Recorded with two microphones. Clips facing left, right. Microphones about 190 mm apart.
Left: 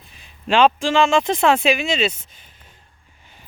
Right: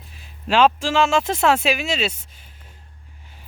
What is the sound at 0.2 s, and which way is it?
Speech, 5° right (ahead or behind).